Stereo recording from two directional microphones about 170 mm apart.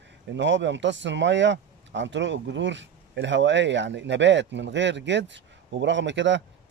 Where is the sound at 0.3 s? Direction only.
90° right.